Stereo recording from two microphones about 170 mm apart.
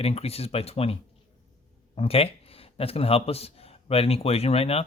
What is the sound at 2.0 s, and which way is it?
Speech, 35° left (ahead or behind).